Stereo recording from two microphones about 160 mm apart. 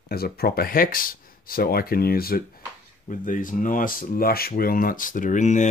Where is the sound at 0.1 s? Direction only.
70° left (ahead or behind).